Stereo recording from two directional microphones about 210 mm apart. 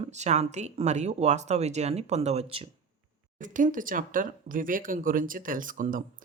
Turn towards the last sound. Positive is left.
turn(degrees=-40)  # may be behind; listen again after turning